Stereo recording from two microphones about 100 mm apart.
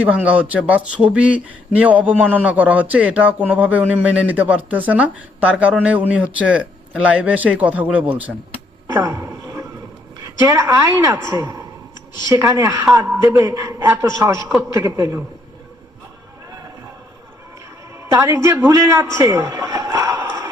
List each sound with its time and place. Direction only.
0.0 s speech: 15° right (ahead or behind)
8.9 s a sound: 35° right (ahead or behind)
10.4 s a man's voice: 35° right (ahead or behind)
13.0 s a man's voice: 25° right (ahead or behind)
13.2 s a man's voice: 35° right (ahead or behind)
18.1 s a man's voice: 25° right (ahead or behind)